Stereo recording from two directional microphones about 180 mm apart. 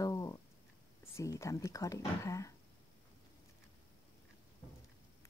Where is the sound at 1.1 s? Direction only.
15° left (ahead or behind).